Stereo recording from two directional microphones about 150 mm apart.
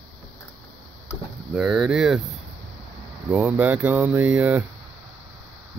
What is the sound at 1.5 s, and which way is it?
Speech, 5° right (ahead or behind).